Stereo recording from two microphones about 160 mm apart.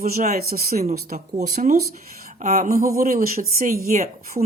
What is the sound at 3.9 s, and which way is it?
Speech, 45° right (ahead or behind).